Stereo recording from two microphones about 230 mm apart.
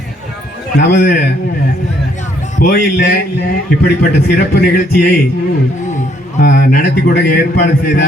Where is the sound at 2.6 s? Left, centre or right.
Left.